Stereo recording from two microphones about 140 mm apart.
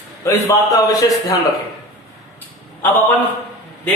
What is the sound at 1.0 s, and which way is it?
Speech, 25° left (ahead or behind).